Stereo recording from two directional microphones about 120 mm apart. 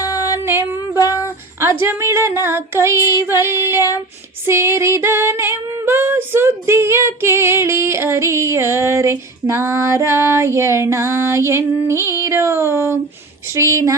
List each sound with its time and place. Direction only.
0.0 s music: 30° left (ahead or behind)
0.9 s a sound: 30° left (ahead or behind)
1.8 s singing: 20° right (ahead or behind)